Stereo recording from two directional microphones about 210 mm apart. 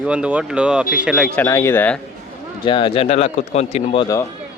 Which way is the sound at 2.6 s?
25° left (ahead or behind).